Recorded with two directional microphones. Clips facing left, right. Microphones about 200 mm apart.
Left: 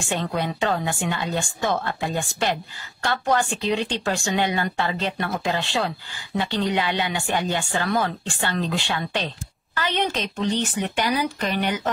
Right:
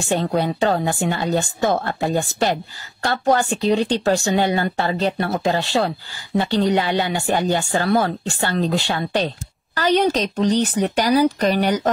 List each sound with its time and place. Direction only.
0.1 s speech: 40° right (ahead or behind)